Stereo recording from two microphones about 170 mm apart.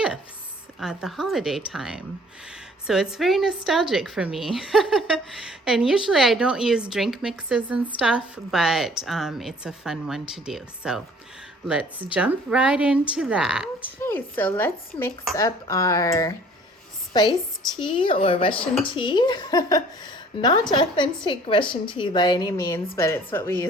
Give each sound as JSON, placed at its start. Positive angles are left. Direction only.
{"t": 0.8, "sound": "a woman's voice", "side_deg": 0}
{"t": 14.0, "sound": "a woman's voice", "side_deg": 10}
{"t": 17.3, "sound": "a woman's voice", "side_deg": 0}
{"t": 17.8, "sound": "a woman's voice", "side_deg": 30}